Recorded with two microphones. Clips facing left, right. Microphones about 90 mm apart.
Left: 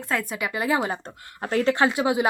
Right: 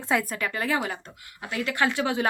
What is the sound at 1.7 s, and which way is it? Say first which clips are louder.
Speech: left 4 dB; 25° left (ahead or behind).